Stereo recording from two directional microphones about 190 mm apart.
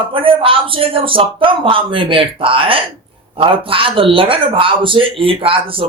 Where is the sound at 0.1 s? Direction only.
30° right (ahead or behind).